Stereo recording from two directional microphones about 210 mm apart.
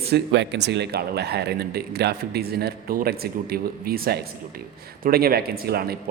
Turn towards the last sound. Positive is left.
turn(degrees=-45)  # may be behind; listen again after turning